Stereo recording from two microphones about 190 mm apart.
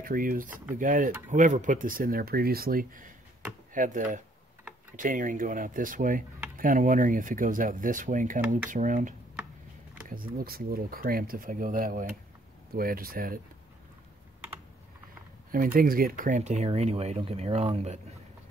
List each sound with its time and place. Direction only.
0.0 s speech: 50° right (ahead or behind)
15.5 s speech: 50° right (ahead or behind)